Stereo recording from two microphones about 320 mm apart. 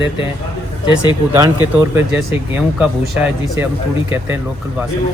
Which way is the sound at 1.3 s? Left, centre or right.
Centre.